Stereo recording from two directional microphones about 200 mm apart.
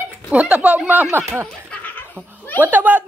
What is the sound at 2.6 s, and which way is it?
Speech, 10° right (ahead or behind).